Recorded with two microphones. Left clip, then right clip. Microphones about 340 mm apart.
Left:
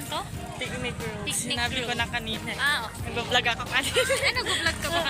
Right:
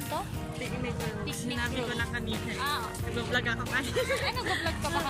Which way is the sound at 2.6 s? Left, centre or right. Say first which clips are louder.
Left 7 dB; centre.